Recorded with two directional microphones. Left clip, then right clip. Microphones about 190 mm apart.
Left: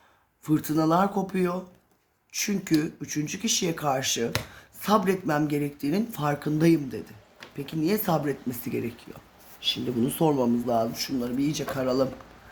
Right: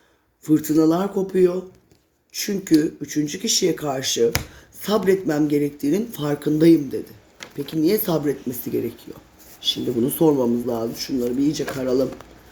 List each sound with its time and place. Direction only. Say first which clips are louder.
0.4 s speech: right 7 dB; 30° left (ahead or behind)
9.6 s speech: right 5 dB; 15° left (ahead or behind); by 12.0 s 35° left (ahead or behind)